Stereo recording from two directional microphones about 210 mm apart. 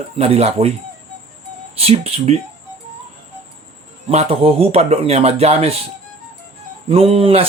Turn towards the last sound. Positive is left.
turn(degrees=-25)  # may be behind; listen again after turning